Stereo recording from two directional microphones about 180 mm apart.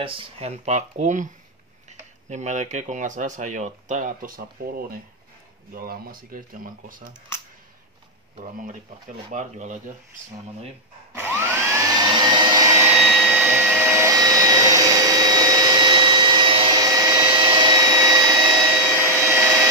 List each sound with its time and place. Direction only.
0.0 s speech: 30° right (ahead or behind); by 7.0 s 50° right (ahead or behind)
9.3 s speech: 45° right (ahead or behind)
11.1 s vacuum cleaner: 10° right (ahead or behind)
13.0 s vacuum cleaner: centre (ahead or behind); by 18.2 s 20° right (ahead or behind)
18.9 s a sound: 10° right (ahead or behind)